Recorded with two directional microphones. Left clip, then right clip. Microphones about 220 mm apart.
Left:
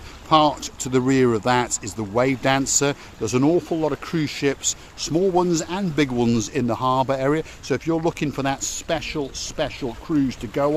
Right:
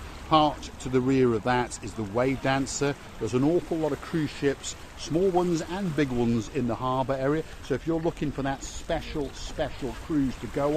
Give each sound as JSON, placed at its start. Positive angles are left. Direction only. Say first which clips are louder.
{"t": 0.3, "sound": "speech", "louder": "left 5 dB", "side_deg": 40}